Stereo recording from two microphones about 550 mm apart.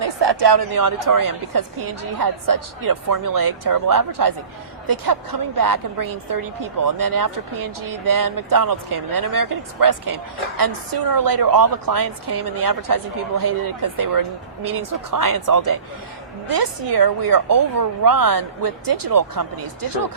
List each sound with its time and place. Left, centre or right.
0.0 s a woman's voice: right
13.4 s speech: right